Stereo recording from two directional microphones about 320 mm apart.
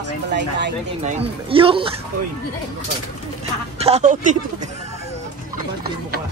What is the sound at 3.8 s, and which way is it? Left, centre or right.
Speech, centre.